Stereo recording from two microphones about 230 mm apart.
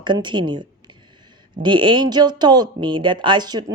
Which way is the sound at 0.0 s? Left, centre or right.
Centre.